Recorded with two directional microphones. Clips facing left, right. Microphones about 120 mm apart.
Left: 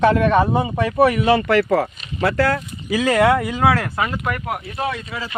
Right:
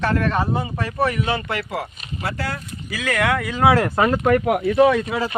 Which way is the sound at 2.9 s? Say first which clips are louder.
Left 6 dB; 30° left (ahead or behind).